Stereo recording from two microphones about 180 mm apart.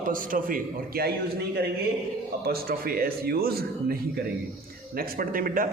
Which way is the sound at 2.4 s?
55° right (ahead or behind).